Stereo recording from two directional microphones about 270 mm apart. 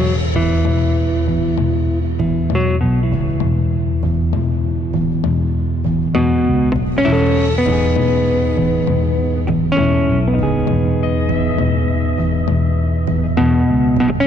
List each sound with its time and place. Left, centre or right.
6.1 s music: centre
9.7 s music: centre
13.4 s music: centre